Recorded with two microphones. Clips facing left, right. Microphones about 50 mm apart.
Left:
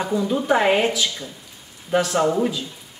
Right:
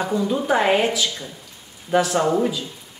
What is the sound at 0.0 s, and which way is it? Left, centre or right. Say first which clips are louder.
Speech: even; centre.